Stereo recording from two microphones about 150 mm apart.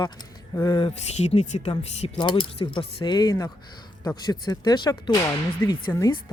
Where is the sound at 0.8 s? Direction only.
40° left (ahead or behind).